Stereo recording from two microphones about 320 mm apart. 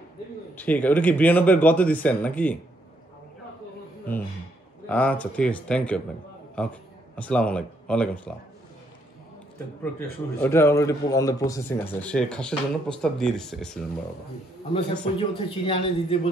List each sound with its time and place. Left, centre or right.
0.6 s speech: centre
4.8 s speech: centre
9.9 s a man's voice: centre
15.1 s a man's voice: centre